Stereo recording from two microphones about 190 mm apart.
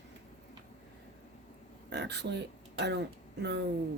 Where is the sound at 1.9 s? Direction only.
65° right (ahead or behind).